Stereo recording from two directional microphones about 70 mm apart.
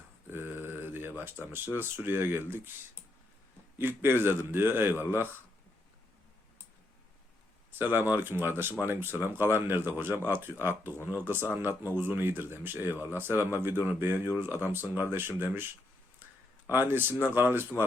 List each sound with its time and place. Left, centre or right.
0.3 s mantra: right
1.2 s speech: right
3.8 s speech: right
7.7 s speech: right
16.6 s speech: right